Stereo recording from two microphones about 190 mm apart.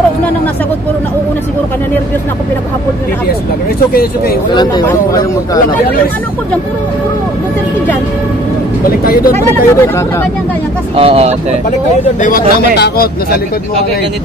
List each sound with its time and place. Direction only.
3.9 s a man's voice: 50° left (ahead or behind)
4.8 s a man's voice: 15° left (ahead or behind)
8.8 s a man's voice: 50° left (ahead or behind)
9.3 s a man's voice: 15° left (ahead or behind)
11.0 s speech: 30° right (ahead or behind)
12.2 s a man's voice: 45° left (ahead or behind)